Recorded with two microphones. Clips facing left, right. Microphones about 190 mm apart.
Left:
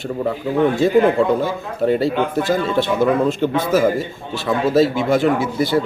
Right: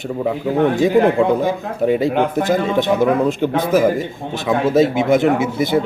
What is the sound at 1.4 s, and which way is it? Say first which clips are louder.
Speech: right 2 dB; 15° right (ahead or behind).